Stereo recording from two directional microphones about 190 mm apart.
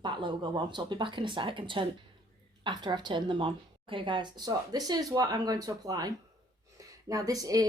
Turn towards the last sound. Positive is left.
turn(degrees=-20)  # may be behind; listen again after turning